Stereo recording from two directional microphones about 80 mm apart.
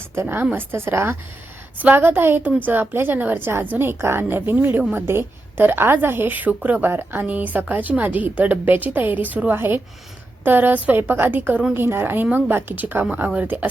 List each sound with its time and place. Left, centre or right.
0.2 s a woman's voice: right